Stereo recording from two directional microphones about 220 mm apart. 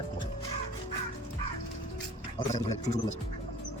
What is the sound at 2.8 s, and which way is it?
Speech, 30° left (ahead or behind).